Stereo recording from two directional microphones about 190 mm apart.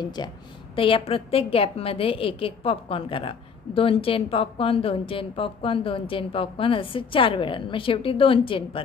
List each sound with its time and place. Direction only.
0.0 s a woman's voice: 20° left (ahead or behind)